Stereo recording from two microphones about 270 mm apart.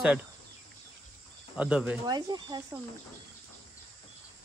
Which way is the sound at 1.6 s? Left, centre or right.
Centre.